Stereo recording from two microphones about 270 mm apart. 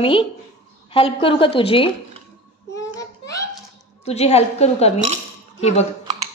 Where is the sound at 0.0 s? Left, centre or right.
Centre.